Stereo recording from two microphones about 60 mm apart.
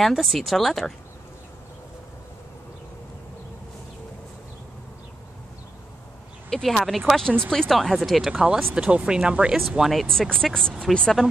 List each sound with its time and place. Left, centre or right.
0.0 s speech: centre
6.5 s speech: centre
8.7 s speech: centre
9.7 s speech: centre
10.0 s speech: centre